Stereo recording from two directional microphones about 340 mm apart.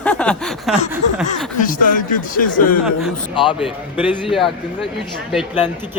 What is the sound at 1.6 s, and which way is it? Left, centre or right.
A man's voice, left.